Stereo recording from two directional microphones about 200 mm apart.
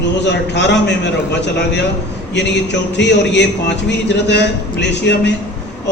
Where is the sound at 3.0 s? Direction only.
60° left (ahead or behind).